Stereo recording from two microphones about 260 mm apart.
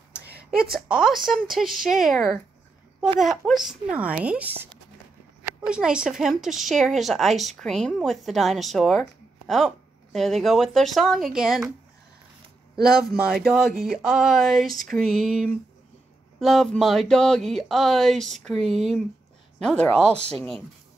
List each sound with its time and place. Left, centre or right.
0.2 s a sound: right
0.5 s speech: centre
10.1 s speech: centre
13.0 s speech: centre